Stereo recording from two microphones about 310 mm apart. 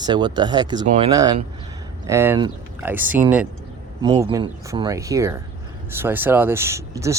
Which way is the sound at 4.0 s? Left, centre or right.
Centre.